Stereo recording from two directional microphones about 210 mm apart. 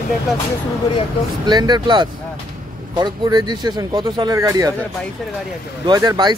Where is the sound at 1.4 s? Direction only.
20° right (ahead or behind).